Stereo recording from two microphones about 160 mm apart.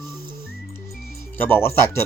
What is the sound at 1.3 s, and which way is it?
Speech, 15° left (ahead or behind).